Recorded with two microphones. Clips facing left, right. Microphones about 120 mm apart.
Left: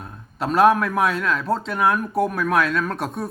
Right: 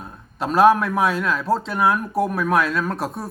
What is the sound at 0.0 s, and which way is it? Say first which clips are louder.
Speech: even; centre (ahead or behind).